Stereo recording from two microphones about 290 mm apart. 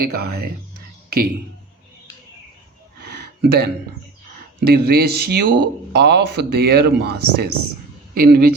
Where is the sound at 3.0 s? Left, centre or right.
Right.